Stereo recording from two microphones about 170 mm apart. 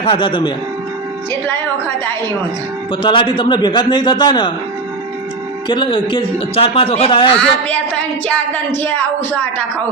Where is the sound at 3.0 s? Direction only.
30° left (ahead or behind).